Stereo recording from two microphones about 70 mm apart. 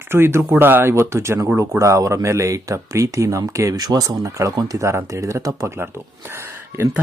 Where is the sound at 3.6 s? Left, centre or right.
Right.